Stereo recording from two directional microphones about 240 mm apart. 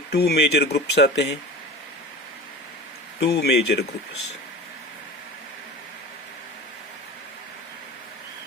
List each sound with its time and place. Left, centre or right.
0.1 s speech: left
3.2 s speech: left